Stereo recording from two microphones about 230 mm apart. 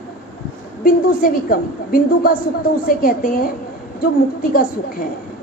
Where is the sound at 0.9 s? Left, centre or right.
Left.